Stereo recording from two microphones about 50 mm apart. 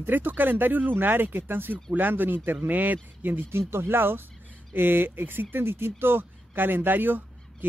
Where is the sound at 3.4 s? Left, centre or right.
Right.